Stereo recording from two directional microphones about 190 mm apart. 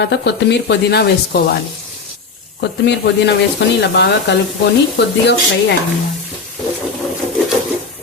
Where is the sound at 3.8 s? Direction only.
65° left (ahead or behind).